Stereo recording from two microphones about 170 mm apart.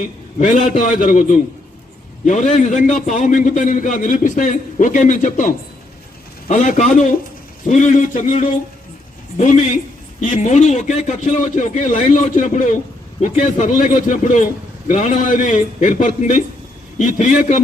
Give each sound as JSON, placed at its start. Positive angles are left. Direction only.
{"t": 0.0, "sound": "a man's voice", "side_deg": 50}